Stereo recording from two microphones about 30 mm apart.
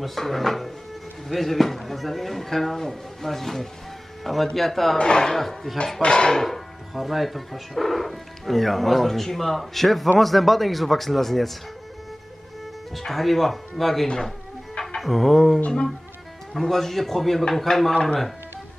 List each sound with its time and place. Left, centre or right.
0.0 s a man's voice: centre
4.9 s speech: left
5.2 s a man's voice: centre
6.0 s speech: left
6.3 s speech: centre
6.9 s speech: centre
12.9 s a man's voice: centre